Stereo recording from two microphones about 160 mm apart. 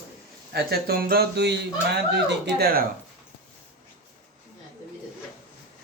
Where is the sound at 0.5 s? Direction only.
75° right (ahead or behind).